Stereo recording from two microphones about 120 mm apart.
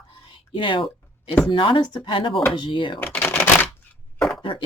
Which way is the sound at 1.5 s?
45° left (ahead or behind).